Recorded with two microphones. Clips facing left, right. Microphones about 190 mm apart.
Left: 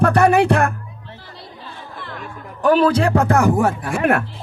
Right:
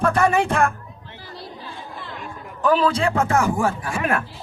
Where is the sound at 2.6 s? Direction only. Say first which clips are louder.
Left 4 dB; 65° left (ahead or behind).